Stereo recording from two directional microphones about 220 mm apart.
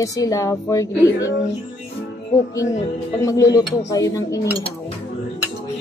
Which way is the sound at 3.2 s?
15° left (ahead or behind).